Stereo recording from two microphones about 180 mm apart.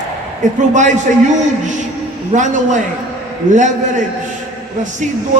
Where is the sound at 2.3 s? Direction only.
45° right (ahead or behind).